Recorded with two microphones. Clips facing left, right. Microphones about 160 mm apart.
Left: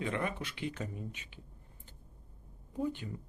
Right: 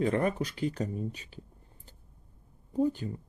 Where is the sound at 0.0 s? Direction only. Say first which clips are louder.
Right 8 dB; 40° right (ahead or behind).